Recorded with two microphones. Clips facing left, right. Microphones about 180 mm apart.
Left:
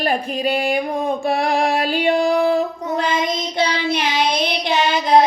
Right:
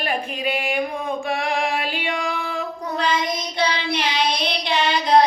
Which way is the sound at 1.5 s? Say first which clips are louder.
Left 6 dB; 40° left (ahead or behind).